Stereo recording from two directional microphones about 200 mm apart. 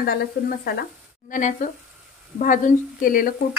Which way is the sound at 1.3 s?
40° left (ahead or behind).